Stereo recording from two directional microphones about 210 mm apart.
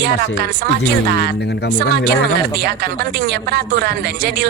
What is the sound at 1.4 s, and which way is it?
Speech, 50° left (ahead or behind).